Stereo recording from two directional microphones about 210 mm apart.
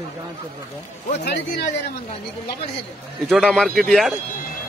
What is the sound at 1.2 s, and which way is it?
Speech, 55° left (ahead or behind).